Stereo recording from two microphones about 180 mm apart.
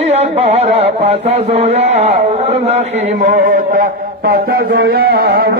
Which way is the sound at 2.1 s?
40° right (ahead or behind).